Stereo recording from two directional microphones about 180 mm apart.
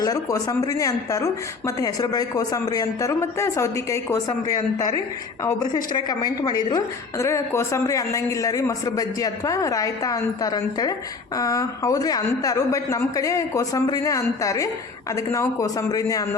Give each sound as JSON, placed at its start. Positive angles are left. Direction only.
{"t": 0.0, "sound": "a woman's voice", "side_deg": 20}